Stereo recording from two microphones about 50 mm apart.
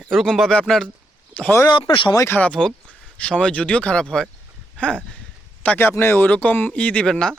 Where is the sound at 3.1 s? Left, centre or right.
Left.